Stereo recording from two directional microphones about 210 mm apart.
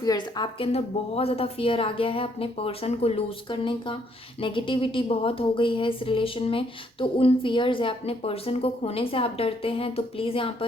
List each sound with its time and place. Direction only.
0.0 s speech: 20° left (ahead or behind)